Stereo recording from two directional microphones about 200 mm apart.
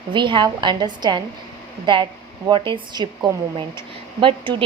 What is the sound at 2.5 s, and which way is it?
Speech, 25° right (ahead or behind).